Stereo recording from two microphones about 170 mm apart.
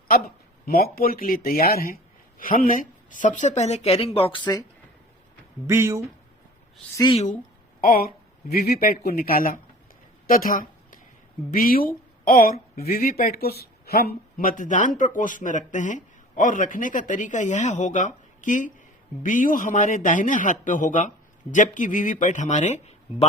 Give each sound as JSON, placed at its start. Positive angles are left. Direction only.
{"t": 0.6, "sound": "speech", "side_deg": 65}
{"t": 5.6, "sound": "speech", "side_deg": -15}
{"t": 6.9, "sound": "a woman's voice", "side_deg": 25}
{"t": 7.8, "sound": "speech", "side_deg": 60}
{"t": 10.2, "sound": "a sound", "side_deg": 55}
{"t": 11.5, "sound": "speech", "side_deg": 55}